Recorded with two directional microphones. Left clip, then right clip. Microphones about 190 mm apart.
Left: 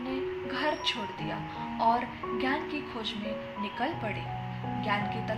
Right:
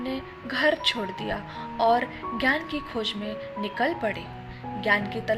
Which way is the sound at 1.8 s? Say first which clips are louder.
Right 5 dB; 35° right (ahead or behind).